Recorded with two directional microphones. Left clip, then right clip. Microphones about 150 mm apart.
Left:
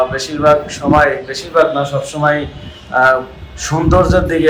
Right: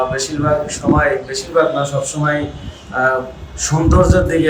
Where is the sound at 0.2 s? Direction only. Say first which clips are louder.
Left 5 dB; 5° right (ahead or behind).